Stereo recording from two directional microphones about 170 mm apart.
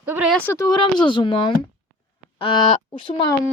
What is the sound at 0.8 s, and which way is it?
Speech, 30° left (ahead or behind).